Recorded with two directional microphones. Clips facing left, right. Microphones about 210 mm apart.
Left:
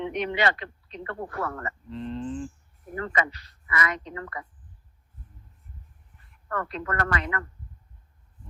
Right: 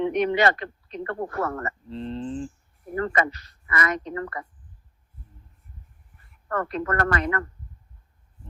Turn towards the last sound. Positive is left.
turn(degrees=-45)  # may be behind; listen again after turning